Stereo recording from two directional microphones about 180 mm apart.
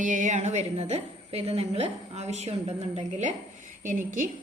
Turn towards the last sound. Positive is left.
turn(degrees=-45)  # may be behind; listen again after turning